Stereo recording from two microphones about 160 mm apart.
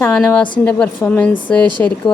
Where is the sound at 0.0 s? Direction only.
10° left (ahead or behind).